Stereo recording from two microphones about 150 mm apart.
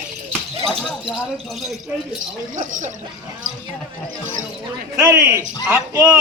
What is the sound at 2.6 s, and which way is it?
Speech, 60° right (ahead or behind).